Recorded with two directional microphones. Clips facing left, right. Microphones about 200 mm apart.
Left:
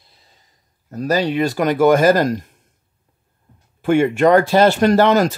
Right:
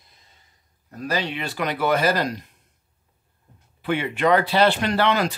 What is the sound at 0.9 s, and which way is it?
Speech, 40° left (ahead or behind).